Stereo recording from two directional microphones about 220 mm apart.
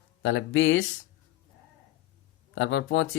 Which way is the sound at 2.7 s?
55° left (ahead or behind).